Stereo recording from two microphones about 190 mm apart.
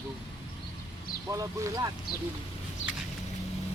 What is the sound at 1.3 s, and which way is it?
Speech, 15° right (ahead or behind).